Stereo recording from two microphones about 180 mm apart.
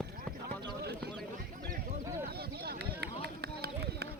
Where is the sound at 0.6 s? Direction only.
65° right (ahead or behind).